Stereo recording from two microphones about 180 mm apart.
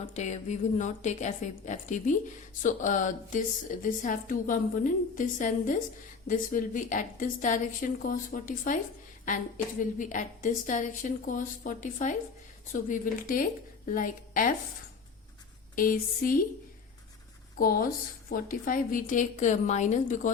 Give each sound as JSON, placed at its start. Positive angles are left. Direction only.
{"t": 0.1, "sound": "a woman's voice", "side_deg": 40}
{"t": 10.0, "sound": "a woman's voice", "side_deg": 45}
{"t": 15.7, "sound": "a woman's voice", "side_deg": 50}
{"t": 17.6, "sound": "a woman's voice", "side_deg": 55}